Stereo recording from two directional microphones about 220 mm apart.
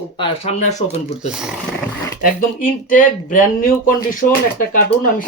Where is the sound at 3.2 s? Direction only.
35° left (ahead or behind).